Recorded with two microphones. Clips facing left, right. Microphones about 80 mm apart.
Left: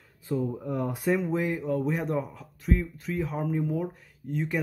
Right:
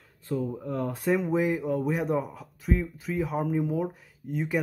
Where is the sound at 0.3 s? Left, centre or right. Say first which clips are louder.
Left 1 dB; centre.